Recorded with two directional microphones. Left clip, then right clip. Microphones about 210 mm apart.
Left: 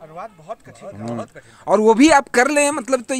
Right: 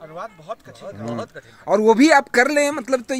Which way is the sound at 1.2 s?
10° right (ahead or behind).